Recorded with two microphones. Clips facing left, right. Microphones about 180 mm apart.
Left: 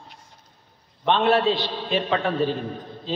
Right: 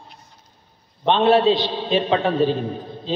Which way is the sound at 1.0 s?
25° right (ahead or behind).